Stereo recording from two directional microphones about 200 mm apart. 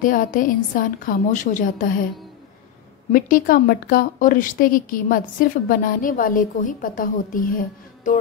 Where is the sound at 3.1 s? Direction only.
45° left (ahead or behind).